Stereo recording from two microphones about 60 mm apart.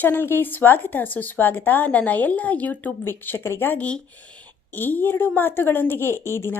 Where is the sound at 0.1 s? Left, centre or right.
Left.